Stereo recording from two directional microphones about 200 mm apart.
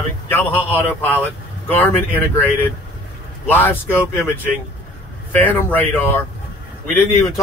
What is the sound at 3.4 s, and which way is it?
Speech, 10° left (ahead or behind).